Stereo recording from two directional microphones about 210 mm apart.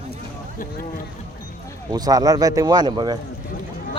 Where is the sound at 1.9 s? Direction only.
20° right (ahead or behind).